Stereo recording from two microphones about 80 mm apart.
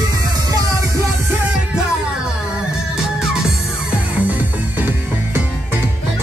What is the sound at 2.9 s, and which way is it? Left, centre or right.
Music, centre.